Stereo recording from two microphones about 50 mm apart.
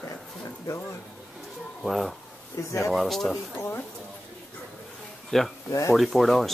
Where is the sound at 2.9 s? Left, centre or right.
Centre.